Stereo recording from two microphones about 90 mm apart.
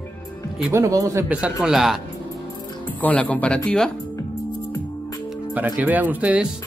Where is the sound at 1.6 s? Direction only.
5° right (ahead or behind).